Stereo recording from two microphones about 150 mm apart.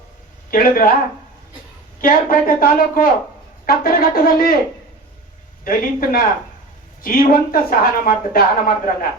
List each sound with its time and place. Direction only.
0.5 s a woman's voice: 70° left (ahead or behind)
2.0 s a woman's voice: 70° left (ahead or behind)
5.6 s a woman's voice: 75° left (ahead or behind)